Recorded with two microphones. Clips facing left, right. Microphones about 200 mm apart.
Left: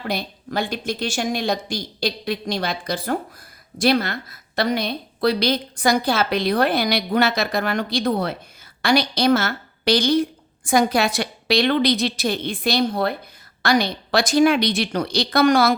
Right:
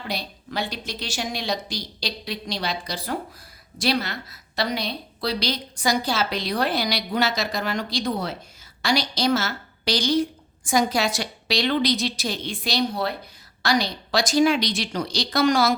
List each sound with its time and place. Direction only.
0.0 s a woman's voice: 55° left (ahead or behind)